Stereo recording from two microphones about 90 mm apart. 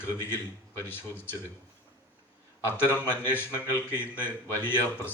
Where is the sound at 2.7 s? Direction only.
25° left (ahead or behind).